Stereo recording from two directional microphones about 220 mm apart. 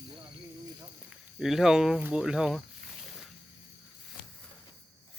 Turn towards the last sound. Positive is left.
turn(degrees=0)  # may be behind; listen again after turning